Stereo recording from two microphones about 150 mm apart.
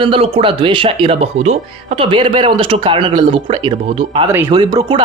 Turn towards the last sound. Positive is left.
turn(degrees=-30)  # may be behind; listen again after turning